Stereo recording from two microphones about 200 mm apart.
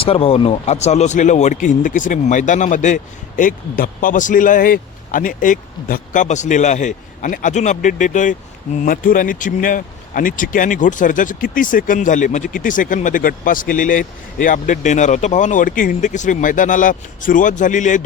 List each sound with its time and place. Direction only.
0.0 s speech: 30° left (ahead or behind)